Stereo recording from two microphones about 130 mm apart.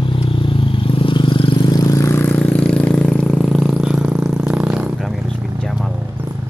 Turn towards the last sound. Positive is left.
turn(degrees=0)  # may be behind; listen again after turning